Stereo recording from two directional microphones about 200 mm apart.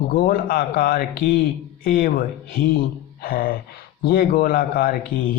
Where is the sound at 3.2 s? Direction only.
50° left (ahead or behind).